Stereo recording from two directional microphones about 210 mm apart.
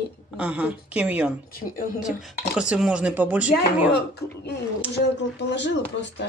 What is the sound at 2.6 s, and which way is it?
Speech, 5° right (ahead or behind).